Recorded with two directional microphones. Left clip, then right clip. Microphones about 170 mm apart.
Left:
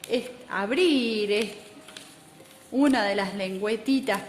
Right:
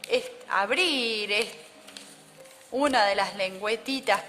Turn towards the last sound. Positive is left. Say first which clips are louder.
# even
turn(degrees=-40)  # may be behind; listen again after turning